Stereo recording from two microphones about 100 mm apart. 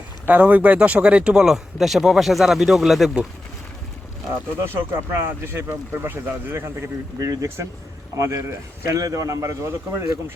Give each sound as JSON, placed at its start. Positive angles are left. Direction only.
{"t": 0.3, "sound": "speech", "side_deg": -15}
{"t": 4.6, "sound": "speech", "side_deg": -25}